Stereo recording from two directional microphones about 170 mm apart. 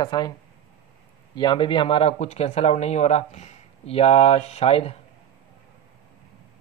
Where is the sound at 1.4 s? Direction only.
30° left (ahead or behind).